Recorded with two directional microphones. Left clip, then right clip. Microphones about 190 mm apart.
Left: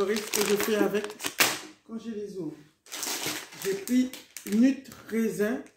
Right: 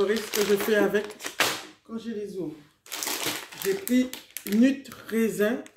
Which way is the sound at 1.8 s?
10° right (ahead or behind).